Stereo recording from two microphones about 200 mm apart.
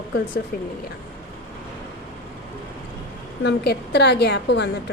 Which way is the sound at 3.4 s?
60° left (ahead or behind).